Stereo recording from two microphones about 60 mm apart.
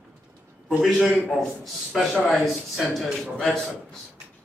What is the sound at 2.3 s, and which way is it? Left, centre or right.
A man's voice, centre.